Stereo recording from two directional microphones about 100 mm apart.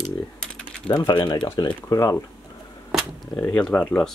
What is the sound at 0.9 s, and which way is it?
Speech, 50° left (ahead or behind).